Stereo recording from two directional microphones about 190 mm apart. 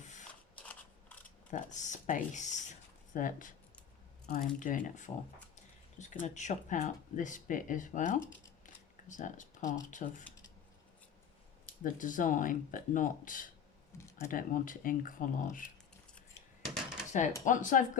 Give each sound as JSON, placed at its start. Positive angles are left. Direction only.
{"t": 0.3, "sound": "a sound", "side_deg": 5}
{"t": 1.5, "sound": "speech", "side_deg": 40}
{"t": 8.6, "sound": "a sound", "side_deg": 40}
{"t": 9.9, "sound": "speech", "side_deg": 40}
{"t": 11.8, "sound": "speech", "side_deg": 45}
{"t": 17.1, "sound": "speech", "side_deg": 40}